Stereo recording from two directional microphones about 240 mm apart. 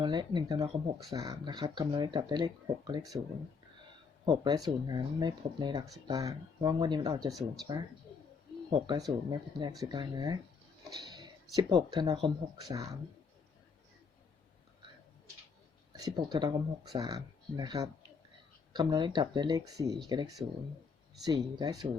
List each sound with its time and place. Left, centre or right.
0.0 s speech: centre
4.3 s speech: centre
7.3 s speech: centre
8.7 s speech: centre
11.5 s speech: centre
16.0 s speech: centre